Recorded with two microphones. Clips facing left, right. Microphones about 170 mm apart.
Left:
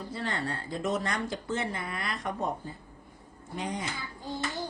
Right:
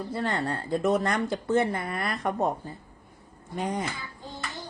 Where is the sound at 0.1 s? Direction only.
50° right (ahead or behind).